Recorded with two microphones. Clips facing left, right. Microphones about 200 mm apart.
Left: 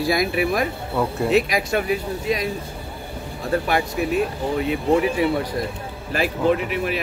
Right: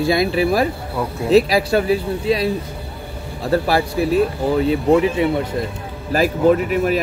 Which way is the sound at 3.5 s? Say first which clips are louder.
Right 4 dB; 35° right (ahead or behind).